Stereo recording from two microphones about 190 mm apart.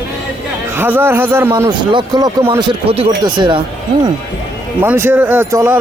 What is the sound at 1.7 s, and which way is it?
Speech, 25° right (ahead or behind).